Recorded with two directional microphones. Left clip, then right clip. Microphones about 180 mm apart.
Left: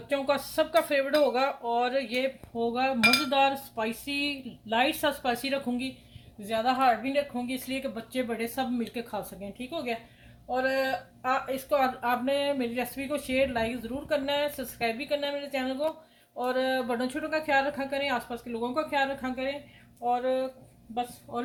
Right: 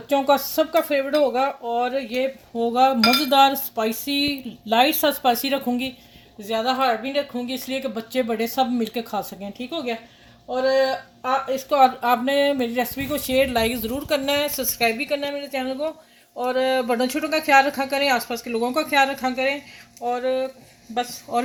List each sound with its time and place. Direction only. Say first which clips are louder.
0.1 s speech: right 9 dB; 50° right (ahead or behind)
21.3 s a man's voice: right 11 dB; 60° right (ahead or behind)